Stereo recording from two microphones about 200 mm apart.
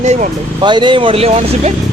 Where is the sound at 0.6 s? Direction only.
20° right (ahead or behind).